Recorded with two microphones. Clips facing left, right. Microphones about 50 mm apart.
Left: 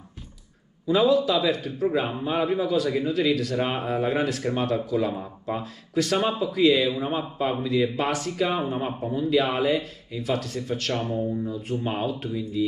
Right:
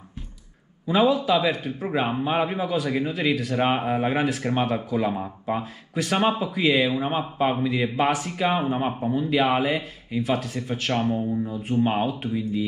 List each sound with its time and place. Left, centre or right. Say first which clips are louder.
0.8 s speech: even; right